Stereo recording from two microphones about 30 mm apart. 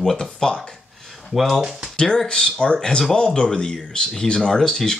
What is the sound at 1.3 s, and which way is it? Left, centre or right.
Speech, centre.